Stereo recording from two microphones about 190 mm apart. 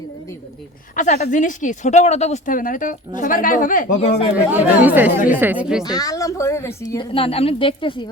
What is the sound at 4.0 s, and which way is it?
Speech, 30° left (ahead or behind).